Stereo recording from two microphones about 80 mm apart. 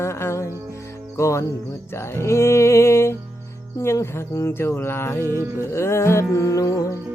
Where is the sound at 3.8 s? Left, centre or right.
Left.